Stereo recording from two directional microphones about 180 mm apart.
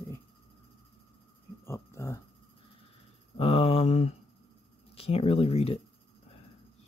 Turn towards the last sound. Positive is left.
turn(degrees=35)  # may be behind; listen again after turning